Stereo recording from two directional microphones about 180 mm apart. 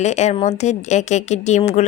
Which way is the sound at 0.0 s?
40° left (ahead or behind).